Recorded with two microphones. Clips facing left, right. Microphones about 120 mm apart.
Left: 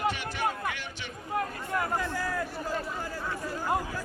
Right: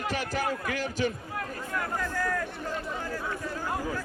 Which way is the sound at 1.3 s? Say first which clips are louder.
Left 3 dB; 20° left (ahead or behind).